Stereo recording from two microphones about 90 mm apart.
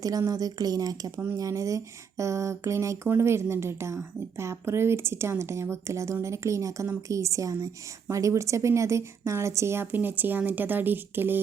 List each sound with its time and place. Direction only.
0.0 s a woman's voice: 40° right (ahead or behind); by 11.3 s 25° right (ahead or behind)